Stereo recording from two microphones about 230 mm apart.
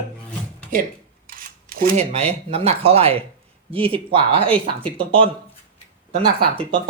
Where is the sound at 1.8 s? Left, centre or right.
Right.